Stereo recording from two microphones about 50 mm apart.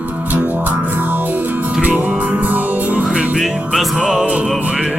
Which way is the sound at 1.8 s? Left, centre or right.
Right.